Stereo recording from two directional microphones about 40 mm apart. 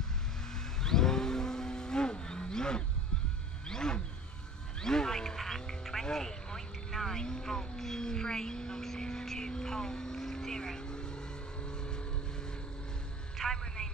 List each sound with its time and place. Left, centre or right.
0.6 s vehicle: centre
4.7 s quack: centre
13.4 s a sound: centre